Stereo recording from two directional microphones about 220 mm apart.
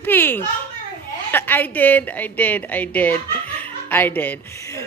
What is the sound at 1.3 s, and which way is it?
A woman's voice, 10° left (ahead or behind).